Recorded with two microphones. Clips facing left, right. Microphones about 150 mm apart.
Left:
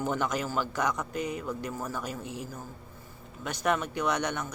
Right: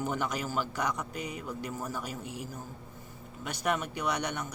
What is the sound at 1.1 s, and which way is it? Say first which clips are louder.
Speech: left 5 dB; 50° left (ahead or behind).